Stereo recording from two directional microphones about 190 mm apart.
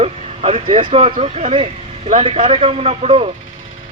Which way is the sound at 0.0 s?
30° right (ahead or behind).